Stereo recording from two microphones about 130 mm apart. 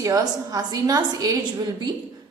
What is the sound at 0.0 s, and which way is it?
A woman's voice, 25° right (ahead or behind).